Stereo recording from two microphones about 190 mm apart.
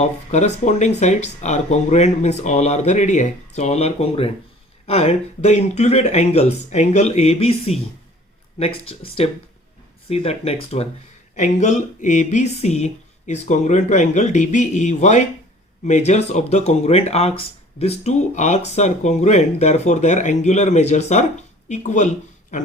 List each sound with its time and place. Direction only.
0.0 s speech: 35° left (ahead or behind)